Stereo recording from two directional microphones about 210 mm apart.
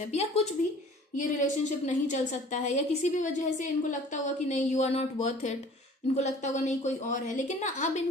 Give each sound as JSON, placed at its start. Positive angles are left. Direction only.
{"t": 0.1, "sound": "a woman's voice", "side_deg": 30}